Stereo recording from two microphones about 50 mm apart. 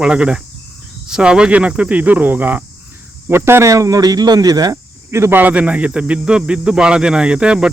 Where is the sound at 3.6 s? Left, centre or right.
Right.